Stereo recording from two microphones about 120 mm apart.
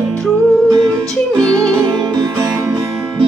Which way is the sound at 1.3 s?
5° left (ahead or behind).